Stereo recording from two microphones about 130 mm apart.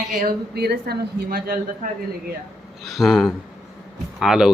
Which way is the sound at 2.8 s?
Centre (ahead or behind).